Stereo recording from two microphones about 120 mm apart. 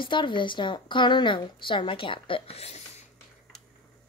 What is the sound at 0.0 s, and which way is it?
A woman's voice, 40° left (ahead or behind).